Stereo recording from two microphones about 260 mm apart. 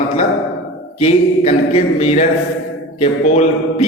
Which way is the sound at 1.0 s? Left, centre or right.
Left.